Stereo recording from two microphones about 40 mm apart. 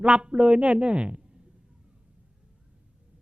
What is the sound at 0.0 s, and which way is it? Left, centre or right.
A man's voice, right.